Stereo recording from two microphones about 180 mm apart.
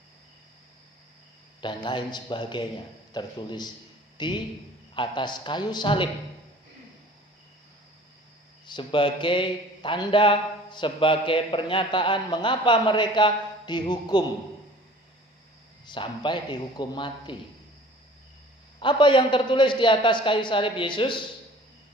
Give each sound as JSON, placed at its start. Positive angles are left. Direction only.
{"t": 1.6, "sound": "speech", "side_deg": 25}
{"t": 8.6, "sound": "speech", "side_deg": 25}
{"t": 15.9, "sound": "speech", "side_deg": 25}
{"t": 18.8, "sound": "speech", "side_deg": 25}